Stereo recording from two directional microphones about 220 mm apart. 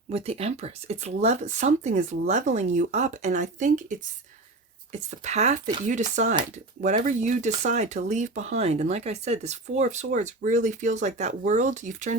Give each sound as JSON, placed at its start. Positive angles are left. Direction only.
{"t": 0.1, "sound": "speech", "side_deg": -25}